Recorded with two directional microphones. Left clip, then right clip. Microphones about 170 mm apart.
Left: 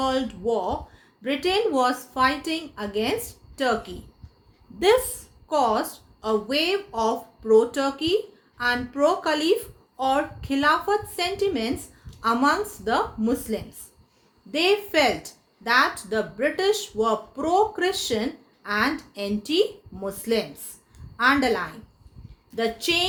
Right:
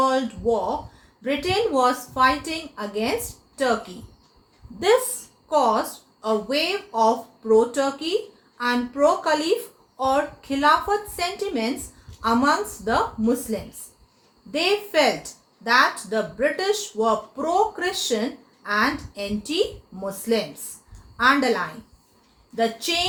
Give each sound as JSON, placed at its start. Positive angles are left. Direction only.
{"t": 0.0, "sound": "a woman's voice", "side_deg": 50}
{"t": 5.5, "sound": "a woman's voice", "side_deg": 50}